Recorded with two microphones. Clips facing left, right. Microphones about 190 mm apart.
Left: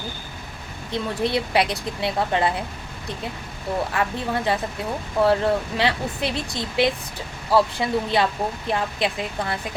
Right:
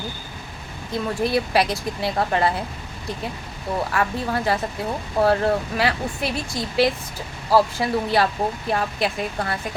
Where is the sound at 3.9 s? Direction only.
20° left (ahead or behind).